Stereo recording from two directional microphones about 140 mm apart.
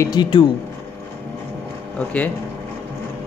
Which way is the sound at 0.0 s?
30° left (ahead or behind).